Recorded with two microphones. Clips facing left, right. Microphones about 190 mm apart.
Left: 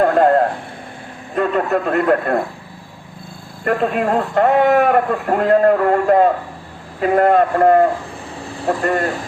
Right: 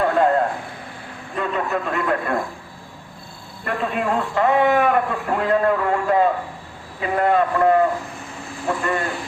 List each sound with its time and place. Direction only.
0.0 s a sound: 45° left (ahead or behind)
1.4 s a man's voice: 45° left (ahead or behind)
3.6 s a man's voice: 45° left (ahead or behind)
8.4 s speech: 35° left (ahead or behind)